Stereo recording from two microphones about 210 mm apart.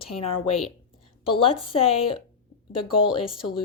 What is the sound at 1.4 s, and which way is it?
Speech, 25° left (ahead or behind).